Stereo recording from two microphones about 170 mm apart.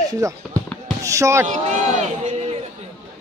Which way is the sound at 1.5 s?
45° right (ahead or behind).